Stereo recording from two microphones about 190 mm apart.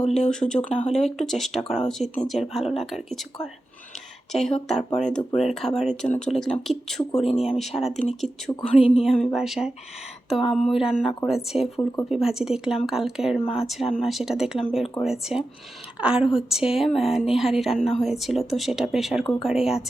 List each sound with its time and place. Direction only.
0.0 s a woman's voice: 5° left (ahead or behind)
7.3 s speech: 35° left (ahead or behind)
7.6 s a woman's voice: centre (ahead or behind)
7.9 s speech: 35° left (ahead or behind)
8.2 s a woman's voice: 5° left (ahead or behind)